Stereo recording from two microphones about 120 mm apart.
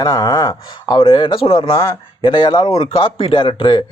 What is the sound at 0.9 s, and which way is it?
A man's voice, 45° left (ahead or behind).